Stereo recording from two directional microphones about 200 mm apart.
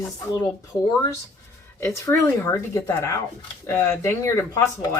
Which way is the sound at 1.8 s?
15° left (ahead or behind).